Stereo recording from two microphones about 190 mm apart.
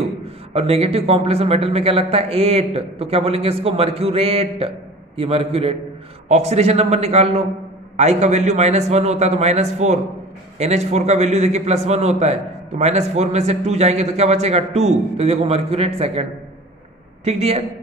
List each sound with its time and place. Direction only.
0.6 s a man's voice: 30° right (ahead or behind)